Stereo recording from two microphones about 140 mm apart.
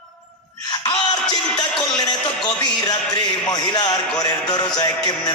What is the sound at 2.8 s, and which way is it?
Music, 30° left (ahead or behind).